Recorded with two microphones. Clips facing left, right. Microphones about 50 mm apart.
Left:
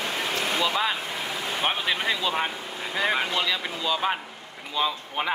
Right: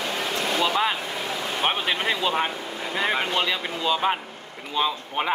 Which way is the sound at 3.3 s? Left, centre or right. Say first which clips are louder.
Right 2 dB; right.